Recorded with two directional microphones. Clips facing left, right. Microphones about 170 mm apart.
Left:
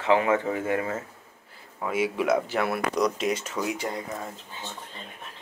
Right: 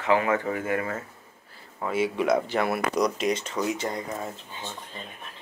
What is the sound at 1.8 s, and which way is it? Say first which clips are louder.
Speech: right 1 dB; 10° left (ahead or behind).